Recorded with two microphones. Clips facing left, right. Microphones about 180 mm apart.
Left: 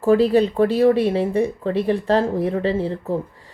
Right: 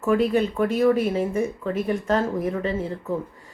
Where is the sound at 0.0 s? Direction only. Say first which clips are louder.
Left 5 dB; 35° left (ahead or behind).